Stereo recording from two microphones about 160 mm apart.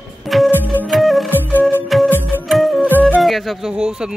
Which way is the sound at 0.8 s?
Centre (ahead or behind).